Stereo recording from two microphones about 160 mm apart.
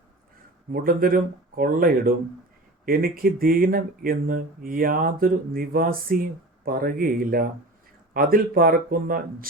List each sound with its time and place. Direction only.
0.7 s speech: 65° right (ahead or behind)